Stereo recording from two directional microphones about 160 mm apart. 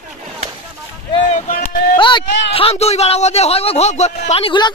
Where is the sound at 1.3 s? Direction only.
60° left (ahead or behind).